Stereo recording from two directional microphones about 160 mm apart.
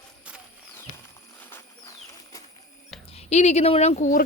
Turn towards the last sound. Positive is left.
turn(degrees=50)  # may be behind; listen again after turning